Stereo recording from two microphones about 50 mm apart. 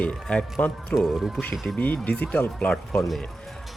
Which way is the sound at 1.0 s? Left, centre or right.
Centre.